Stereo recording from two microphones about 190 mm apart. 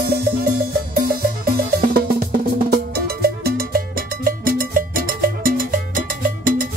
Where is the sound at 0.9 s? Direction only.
50° right (ahead or behind).